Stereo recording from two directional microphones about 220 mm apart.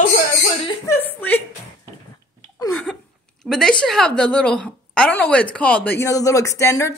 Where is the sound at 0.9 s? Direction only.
10° left (ahead or behind).